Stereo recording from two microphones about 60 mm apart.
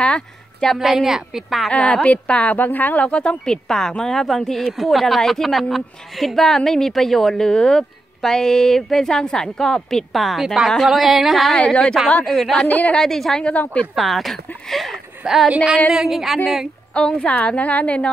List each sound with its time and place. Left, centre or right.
0.0 s a sound: centre
0.7 s speech: centre
1.7 s a woman's voice: centre
11.5 s speech: centre
12.6 s a woman's voice: left
12.9 s speech: centre
13.4 s a woman's voice: left
13.9 s speech: centre
15.5 s a sound: centre
15.9 s speech: centre
16.9 s a woman's voice: centre